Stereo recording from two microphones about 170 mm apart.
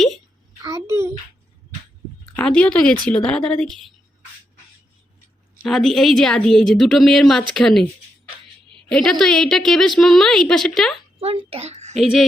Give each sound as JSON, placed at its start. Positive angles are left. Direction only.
{"t": 0.6, "sound": "a sound", "side_deg": -20}
{"t": 2.3, "sound": "a woman's voice", "side_deg": 5}
{"t": 5.6, "sound": "a woman's voice", "side_deg": 0}
{"t": 8.9, "sound": "a woman's voice", "side_deg": 5}
{"t": 11.2, "sound": "a child's voice", "side_deg": -35}